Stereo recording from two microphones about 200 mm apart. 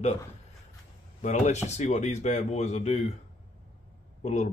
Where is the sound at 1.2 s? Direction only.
35° left (ahead or behind).